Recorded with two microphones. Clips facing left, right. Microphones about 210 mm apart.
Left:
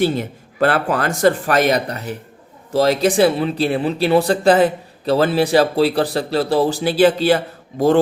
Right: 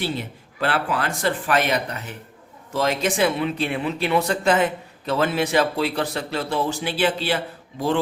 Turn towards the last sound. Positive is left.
turn(degrees=45)  # may be behind; listen again after turning